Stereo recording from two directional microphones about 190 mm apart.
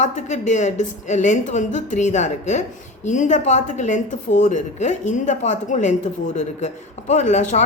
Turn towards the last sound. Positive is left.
turn(degrees=40)  # may be behind; listen again after turning